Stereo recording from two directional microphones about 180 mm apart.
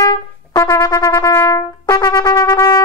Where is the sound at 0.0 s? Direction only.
20° left (ahead or behind).